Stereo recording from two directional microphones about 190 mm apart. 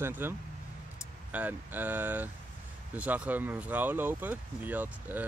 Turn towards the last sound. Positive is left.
turn(degrees=-10)  # may be behind; listen again after turning